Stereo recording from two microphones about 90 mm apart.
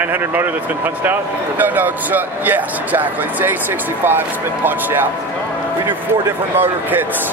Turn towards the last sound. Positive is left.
turn(degrees=-20)  # may be behind; listen again after turning